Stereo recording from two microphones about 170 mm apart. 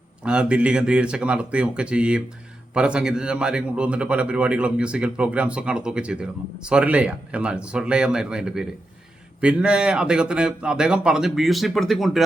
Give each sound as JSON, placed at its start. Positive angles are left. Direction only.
{"t": 0.2, "sound": "a man's voice", "side_deg": -5}